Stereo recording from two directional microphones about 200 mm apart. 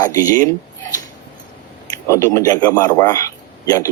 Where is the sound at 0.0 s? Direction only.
20° left (ahead or behind).